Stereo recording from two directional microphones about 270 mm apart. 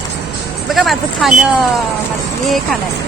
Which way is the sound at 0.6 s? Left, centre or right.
Centre.